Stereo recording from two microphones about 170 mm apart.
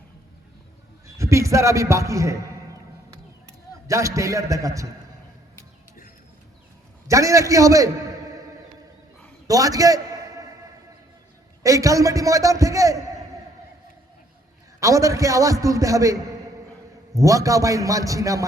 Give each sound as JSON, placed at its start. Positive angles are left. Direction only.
{"t": 1.0, "sound": "a man's voice", "side_deg": -15}
{"t": 3.8, "sound": "a man's voice", "side_deg": -20}
{"t": 7.1, "sound": "a man's voice", "side_deg": -20}
{"t": 9.5, "sound": "a sound", "side_deg": -20}
{"t": 11.6, "sound": "a man's voice", "side_deg": -20}
{"t": 14.8, "sound": "a man's voice", "side_deg": -20}
{"t": 17.2, "sound": "a man's voice", "side_deg": -20}